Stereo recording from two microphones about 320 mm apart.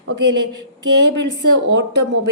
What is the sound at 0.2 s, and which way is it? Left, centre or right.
A woman's voice, right.